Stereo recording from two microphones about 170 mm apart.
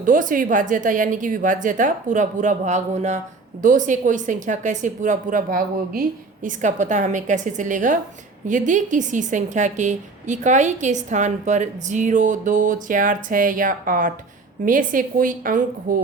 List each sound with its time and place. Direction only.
0.0 s a woman's voice: 50° right (ahead or behind)